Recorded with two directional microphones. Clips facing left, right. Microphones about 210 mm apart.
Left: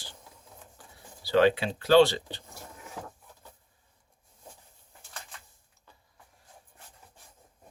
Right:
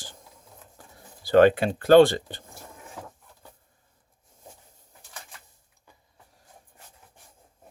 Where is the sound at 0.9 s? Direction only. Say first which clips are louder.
Right 6 dB; 50° right (ahead or behind).